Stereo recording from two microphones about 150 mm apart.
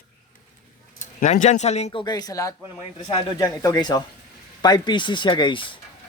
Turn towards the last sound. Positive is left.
turn(degrees=35)  # may be behind; listen again after turning